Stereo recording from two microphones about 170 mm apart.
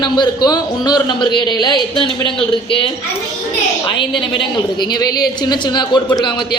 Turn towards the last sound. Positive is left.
turn(degrees=25)  # may be behind; listen again after turning